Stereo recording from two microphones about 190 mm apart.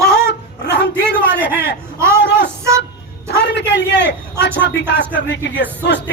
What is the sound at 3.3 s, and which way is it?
A man's voice, 65° left (ahead or behind).